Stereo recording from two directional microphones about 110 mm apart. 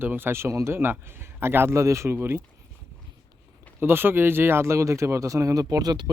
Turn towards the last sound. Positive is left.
turn(degrees=-40)  # may be behind; listen again after turning